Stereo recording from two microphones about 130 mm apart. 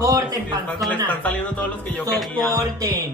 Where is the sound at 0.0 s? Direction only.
25° right (ahead or behind).